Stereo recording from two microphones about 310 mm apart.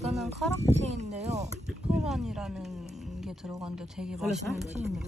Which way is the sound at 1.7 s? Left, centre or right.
Centre.